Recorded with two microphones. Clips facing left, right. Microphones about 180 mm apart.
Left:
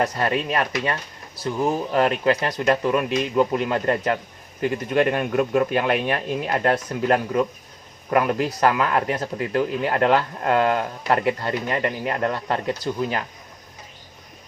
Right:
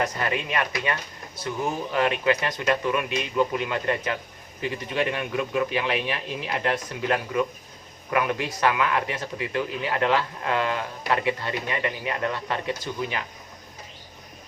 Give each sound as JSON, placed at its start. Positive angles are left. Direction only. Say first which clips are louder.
{"t": 0.0, "sound": "speech", "louder": "left 4 dB", "side_deg": 35}